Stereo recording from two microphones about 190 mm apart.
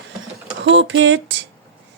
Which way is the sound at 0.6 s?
70° right (ahead or behind).